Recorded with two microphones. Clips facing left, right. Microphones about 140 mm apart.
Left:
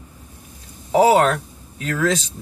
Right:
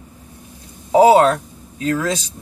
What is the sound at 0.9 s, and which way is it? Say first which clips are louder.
Speech: right 4 dB; 25° right (ahead or behind).